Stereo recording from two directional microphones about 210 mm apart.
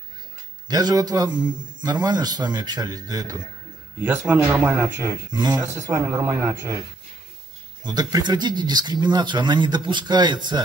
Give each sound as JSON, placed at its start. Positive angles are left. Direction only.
{"t": 0.7, "sound": "a man's voice", "side_deg": -20}
{"t": 7.8, "sound": "a man's voice", "side_deg": -20}